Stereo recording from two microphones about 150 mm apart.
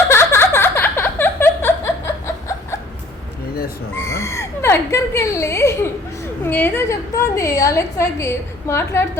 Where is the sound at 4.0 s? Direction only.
20° left (ahead or behind).